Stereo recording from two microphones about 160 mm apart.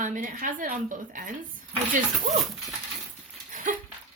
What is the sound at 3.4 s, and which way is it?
Dog, 50° right (ahead or behind).